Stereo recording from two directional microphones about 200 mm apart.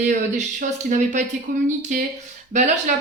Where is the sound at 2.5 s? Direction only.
35° right (ahead or behind).